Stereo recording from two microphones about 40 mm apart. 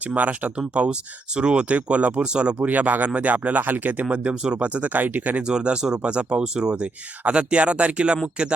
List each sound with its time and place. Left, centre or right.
0.0 s speech: right
2.2 s speech: right
2.6 s speech: right
4.1 s speech: right
5.4 s speech: right